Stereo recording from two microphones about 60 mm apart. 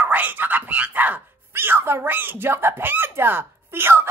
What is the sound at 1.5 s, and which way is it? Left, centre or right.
A woman's voice, right.